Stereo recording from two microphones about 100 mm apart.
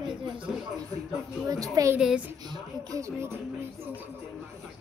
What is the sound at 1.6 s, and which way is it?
Speech, 35° right (ahead or behind).